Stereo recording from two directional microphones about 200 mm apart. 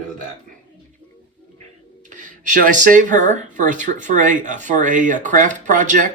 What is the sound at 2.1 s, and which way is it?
Speech, 40° right (ahead or behind).